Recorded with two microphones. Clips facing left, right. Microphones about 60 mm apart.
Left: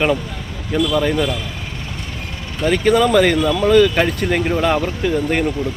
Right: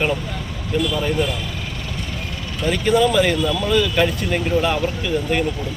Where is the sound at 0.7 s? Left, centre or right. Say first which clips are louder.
Left 4 dB; left.